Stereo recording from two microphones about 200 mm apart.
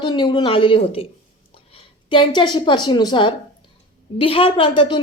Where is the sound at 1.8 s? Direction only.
25° left (ahead or behind).